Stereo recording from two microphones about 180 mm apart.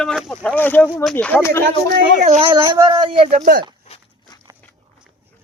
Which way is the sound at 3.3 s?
50° right (ahead or behind).